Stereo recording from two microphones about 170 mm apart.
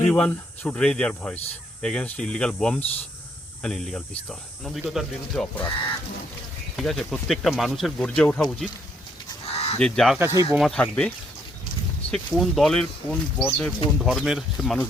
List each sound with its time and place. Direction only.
0.1 s speech: 10° left (ahead or behind)
6.7 s speech: centre (ahead or behind)
9.5 s goose: 40° left (ahead or behind)
9.7 s speech: 5° left (ahead or behind)
10.2 s speech: 15° right (ahead or behind)
10.5 s speech: centre (ahead or behind)
12.1 s speech: centre (ahead or behind)